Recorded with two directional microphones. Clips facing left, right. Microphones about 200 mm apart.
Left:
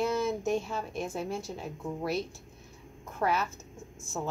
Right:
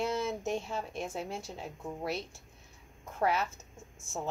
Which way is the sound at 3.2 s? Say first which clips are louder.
Left 1 dB; 25° right (ahead or behind).